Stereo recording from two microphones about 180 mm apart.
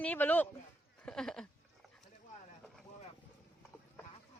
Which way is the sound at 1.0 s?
5° left (ahead or behind).